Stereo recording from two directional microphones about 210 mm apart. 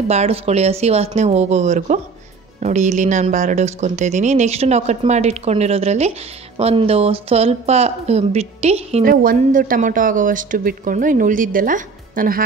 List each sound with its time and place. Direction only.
0.1 s speech: 30° right (ahead or behind)
9.0 s speech: 45° right (ahead or behind)